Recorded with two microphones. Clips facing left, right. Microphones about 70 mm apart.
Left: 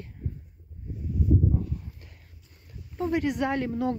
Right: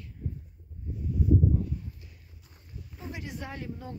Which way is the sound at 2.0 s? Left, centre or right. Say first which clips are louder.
Left 2 dB; left.